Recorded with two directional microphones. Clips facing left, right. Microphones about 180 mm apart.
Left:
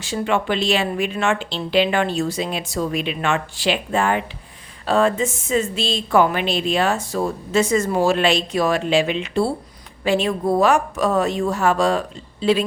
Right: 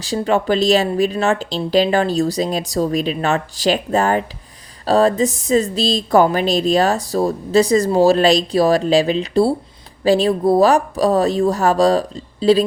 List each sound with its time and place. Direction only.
0.0 s speech: 35° right (ahead or behind)